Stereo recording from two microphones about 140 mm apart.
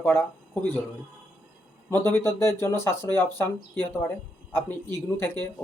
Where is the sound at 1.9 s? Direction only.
15° left (ahead or behind).